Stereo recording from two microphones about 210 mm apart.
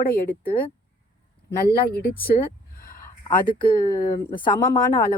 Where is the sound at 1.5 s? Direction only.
50° left (ahead or behind).